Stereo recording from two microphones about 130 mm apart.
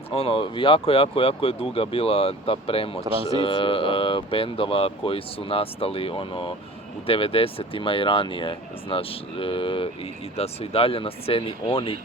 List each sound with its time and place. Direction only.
0.1 s speech: 45° left (ahead or behind)